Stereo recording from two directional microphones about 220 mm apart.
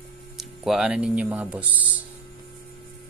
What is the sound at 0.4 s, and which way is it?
Speech, centre (ahead or behind).